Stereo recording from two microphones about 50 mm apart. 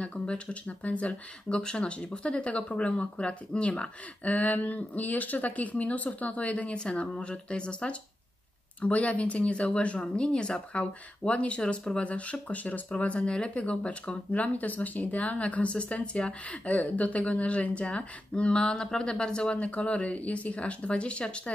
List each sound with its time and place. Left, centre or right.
0.0 s speech: left